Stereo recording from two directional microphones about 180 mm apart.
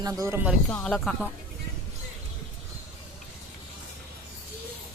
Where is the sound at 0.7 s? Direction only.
5° left (ahead or behind).